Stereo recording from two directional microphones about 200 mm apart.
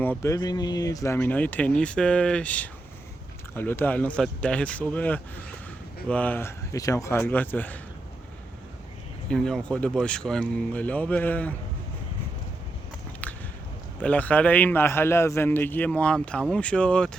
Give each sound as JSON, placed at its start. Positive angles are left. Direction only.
{"t": 0.0, "sound": "a man's voice", "side_deg": 10}
{"t": 9.3, "sound": "speech", "side_deg": 5}
{"t": 13.2, "sound": "a sound", "side_deg": 10}
{"t": 14.0, "sound": "a man's voice", "side_deg": 5}